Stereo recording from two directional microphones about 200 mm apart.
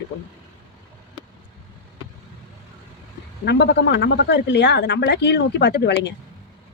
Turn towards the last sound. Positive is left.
turn(degrees=55)  # may be behind; listen again after turning